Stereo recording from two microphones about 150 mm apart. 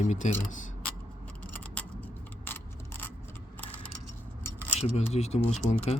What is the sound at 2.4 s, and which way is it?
Keys jangling, 15° left (ahead or behind).